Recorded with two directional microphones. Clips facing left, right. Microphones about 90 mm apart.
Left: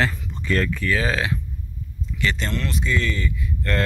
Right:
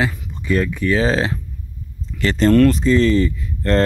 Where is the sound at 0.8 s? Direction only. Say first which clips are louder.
Right 6 dB; 25° right (ahead or behind).